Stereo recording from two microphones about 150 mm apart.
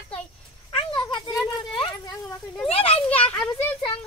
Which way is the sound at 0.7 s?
30° left (ahead or behind).